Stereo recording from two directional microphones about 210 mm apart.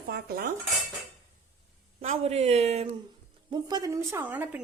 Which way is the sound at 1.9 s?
30° right (ahead or behind).